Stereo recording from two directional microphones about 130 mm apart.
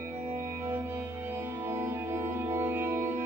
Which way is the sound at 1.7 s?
20° right (ahead or behind).